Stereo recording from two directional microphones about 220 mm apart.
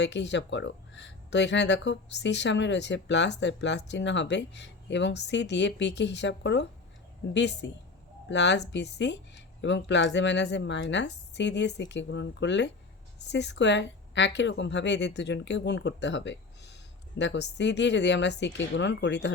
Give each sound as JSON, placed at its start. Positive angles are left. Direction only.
{"t": 0.0, "sound": "speech", "side_deg": 55}